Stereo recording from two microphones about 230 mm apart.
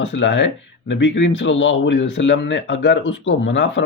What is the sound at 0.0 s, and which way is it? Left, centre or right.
Speech, left.